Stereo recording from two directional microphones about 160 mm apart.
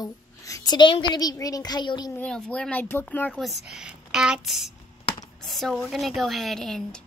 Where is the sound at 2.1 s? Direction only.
5° left (ahead or behind).